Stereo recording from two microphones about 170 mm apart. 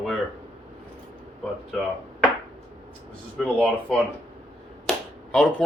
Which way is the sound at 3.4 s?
Centre (ahead or behind).